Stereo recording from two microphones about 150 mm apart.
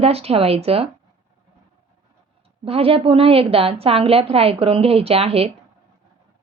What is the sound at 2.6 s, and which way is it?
A woman's voice, 40° right (ahead or behind).